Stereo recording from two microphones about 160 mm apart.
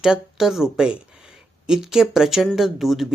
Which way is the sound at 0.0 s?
5° right (ahead or behind).